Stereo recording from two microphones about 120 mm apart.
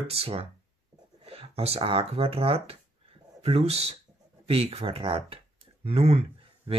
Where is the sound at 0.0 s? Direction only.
55° right (ahead or behind).